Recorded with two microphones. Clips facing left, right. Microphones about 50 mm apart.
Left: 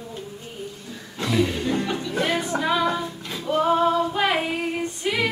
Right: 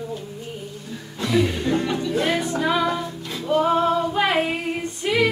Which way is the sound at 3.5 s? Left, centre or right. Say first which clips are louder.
Even; centre.